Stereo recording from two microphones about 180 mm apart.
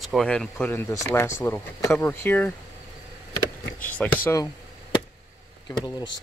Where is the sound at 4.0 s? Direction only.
5° left (ahead or behind).